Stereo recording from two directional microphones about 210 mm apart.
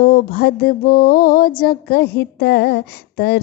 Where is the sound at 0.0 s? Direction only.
45° left (ahead or behind).